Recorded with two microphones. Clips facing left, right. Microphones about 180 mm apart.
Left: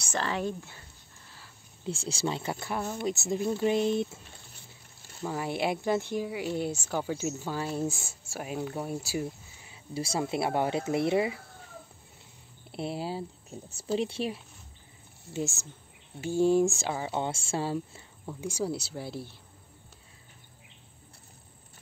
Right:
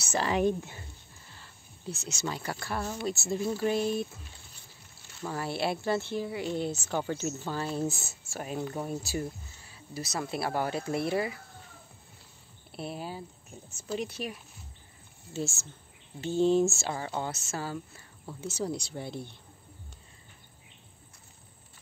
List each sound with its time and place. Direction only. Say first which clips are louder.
0.0 s speech: right 4 dB; 10° right (ahead or behind)
1.9 s speech: left 4 dB; 30° left (ahead or behind)
5.2 s speech: left 1 dB; 15° left (ahead or behind)
9.9 s speech: left 4 dB; 25° left (ahead or behind)
12.7 s speech: left 4 dB; 25° left (ahead or behind)
15.3 s speech: left 1 dB; 15° left (ahead or behind)
17.2 s speech: left 4 dB; 30° left (ahead or behind)
18.2 s speech: left 2 dB; 10° left (ahead or behind)